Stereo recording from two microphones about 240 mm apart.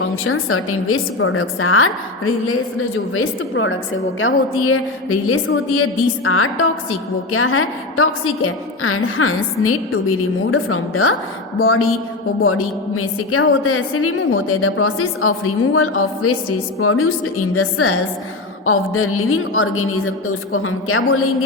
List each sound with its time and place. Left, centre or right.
0.3 s a woman's voice: left